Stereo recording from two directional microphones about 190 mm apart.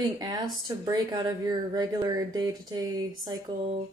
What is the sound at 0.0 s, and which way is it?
A woman's voice, 20° right (ahead or behind).